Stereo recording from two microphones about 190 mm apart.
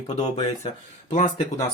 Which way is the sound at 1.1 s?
35° left (ahead or behind).